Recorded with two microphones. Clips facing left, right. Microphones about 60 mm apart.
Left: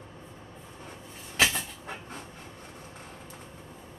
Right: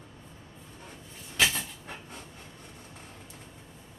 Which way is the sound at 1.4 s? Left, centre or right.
Centre.